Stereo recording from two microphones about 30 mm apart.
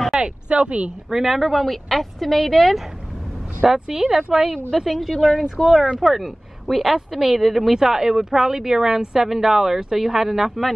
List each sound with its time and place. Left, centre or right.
0.2 s speech: right
1.1 s speech: centre
3.6 s speech: centre
7.7 s speech: centre